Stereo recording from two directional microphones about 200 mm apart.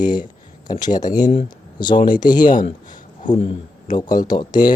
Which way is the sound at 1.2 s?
30° left (ahead or behind).